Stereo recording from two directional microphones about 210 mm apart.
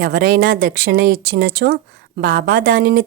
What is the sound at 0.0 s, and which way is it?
Speech, 45° right (ahead or behind).